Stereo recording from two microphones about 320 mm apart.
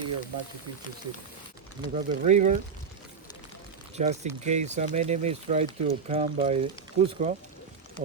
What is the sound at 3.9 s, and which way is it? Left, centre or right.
Speech, right.